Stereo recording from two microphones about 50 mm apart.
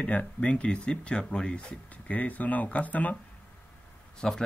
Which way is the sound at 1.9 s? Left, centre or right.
Left.